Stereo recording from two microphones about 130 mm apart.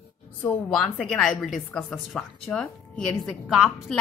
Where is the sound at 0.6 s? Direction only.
5° left (ahead or behind).